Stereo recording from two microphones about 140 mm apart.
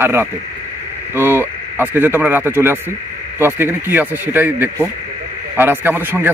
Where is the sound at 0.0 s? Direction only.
15° right (ahead or behind).